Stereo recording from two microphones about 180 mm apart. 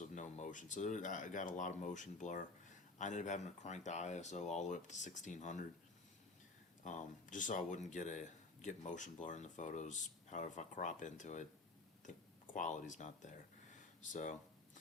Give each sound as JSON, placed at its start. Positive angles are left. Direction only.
{"t": 0.0, "sound": "speech", "side_deg": 45}
{"t": 6.8, "sound": "speech", "side_deg": 45}
{"t": 12.5, "sound": "speech", "side_deg": 45}